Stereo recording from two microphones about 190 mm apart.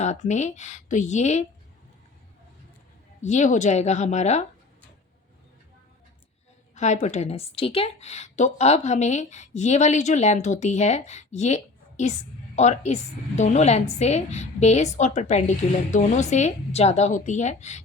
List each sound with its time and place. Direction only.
0.0 s a woman's voice: 35° left (ahead or behind)
3.2 s a woman's voice: 40° left (ahead or behind)
6.7 s a woman's voice: 40° left (ahead or behind)